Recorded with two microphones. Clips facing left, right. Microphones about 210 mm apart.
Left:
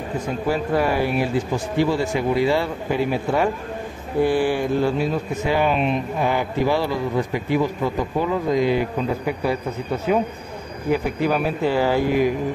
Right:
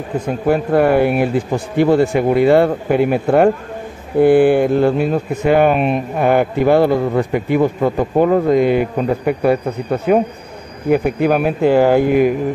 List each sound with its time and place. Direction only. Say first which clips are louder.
0.5 s speech: right 8 dB; 55° right (ahead or behind)